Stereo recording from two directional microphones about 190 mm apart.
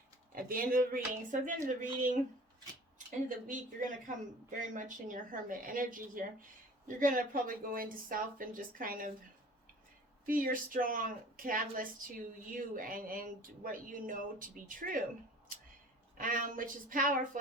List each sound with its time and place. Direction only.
0.3 s speech: 50° right (ahead or behind)
3.2 s speech: 45° right (ahead or behind)
10.2 s speech: 45° right (ahead or behind)
16.1 s speech: 45° right (ahead or behind)